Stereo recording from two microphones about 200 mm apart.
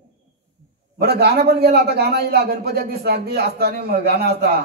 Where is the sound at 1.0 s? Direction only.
55° right (ahead or behind).